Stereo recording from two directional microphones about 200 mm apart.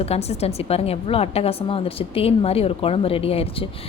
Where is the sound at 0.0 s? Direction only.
30° left (ahead or behind).